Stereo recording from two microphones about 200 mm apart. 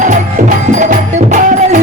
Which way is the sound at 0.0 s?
40° right (ahead or behind).